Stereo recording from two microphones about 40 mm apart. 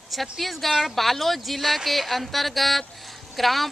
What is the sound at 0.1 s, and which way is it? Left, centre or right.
Speech, centre.